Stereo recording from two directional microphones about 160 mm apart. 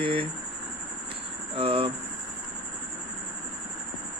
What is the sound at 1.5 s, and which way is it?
Speech, 35° right (ahead or behind).